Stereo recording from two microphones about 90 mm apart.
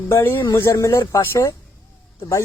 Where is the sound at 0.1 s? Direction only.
25° left (ahead or behind).